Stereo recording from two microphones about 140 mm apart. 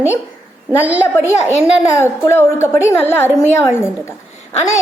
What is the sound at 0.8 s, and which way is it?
Speech, 10° right (ahead or behind).